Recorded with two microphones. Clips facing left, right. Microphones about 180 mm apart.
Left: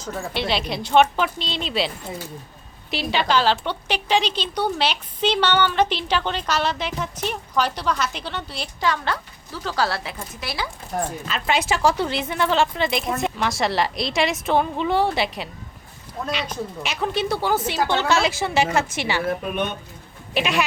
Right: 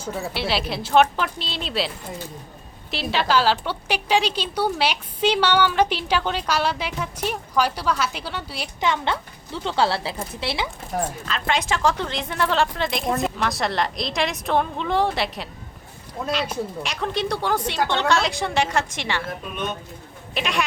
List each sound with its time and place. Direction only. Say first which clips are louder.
0.0 s speech: even; 5° right (ahead or behind)
2.9 s a woman's voice: even; centre (ahead or behind)
8.8 s speech: right 1 dB; 25° right (ahead or behind)
10.9 s speech: even; centre (ahead or behind)
20.3 s speech: left 3 dB; 5° left (ahead or behind)